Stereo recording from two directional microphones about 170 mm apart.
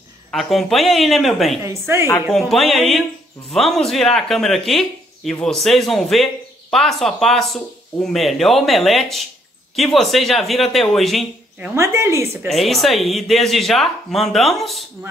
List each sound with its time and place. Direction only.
0.3 s speech: centre (ahead or behind)
1.6 s speech: 15° right (ahead or behind)
2.2 s speech: centre (ahead or behind)
11.7 s speech: 15° right (ahead or behind)
12.4 s speech: centre (ahead or behind)